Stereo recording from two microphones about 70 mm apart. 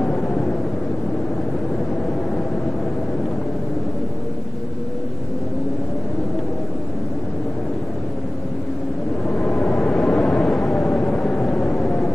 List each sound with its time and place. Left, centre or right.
0.0 s vehicle: centre
9.4 s vehicle: centre